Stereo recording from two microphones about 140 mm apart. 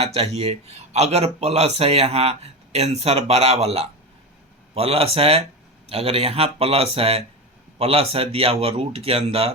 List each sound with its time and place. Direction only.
0.0 s a man's voice: 45° right (ahead or behind)